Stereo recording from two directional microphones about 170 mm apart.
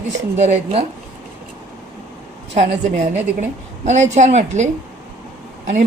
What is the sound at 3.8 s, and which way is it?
A woman's voice, 45° right (ahead or behind).